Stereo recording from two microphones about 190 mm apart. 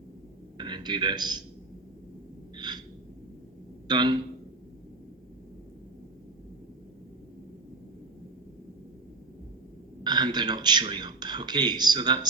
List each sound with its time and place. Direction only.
0.5 s a man's voice: 25° right (ahead or behind)
2.6 s gasp: 20° right (ahead or behind)
3.8 s a man's voice: 25° right (ahead or behind)
10.0 s a man's voice: 25° right (ahead or behind)